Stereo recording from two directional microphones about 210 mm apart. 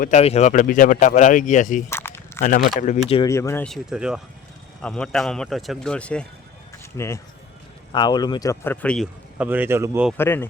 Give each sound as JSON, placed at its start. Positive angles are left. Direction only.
{"t": 0.0, "sound": "speech", "side_deg": 30}
{"t": 1.9, "sound": "biting", "side_deg": 10}
{"t": 2.4, "sound": "speech", "side_deg": 35}
{"t": 3.2, "sound": "speech", "side_deg": 15}
{"t": 9.4, "sound": "a man's voice", "side_deg": -10}
{"t": 10.2, "sound": "speech", "side_deg": 10}